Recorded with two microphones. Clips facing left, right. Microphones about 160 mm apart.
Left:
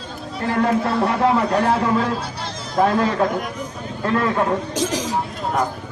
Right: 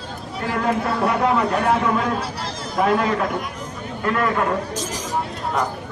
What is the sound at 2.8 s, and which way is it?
A man's voice, 30° left (ahead or behind).